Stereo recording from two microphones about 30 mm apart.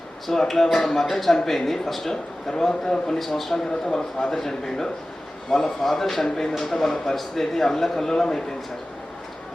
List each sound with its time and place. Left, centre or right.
0.3 s a man's voice: centre
3.2 s speech: centre
3.7 s a man's voice: centre